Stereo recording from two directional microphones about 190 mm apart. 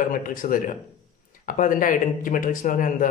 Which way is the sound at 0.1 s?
45° left (ahead or behind).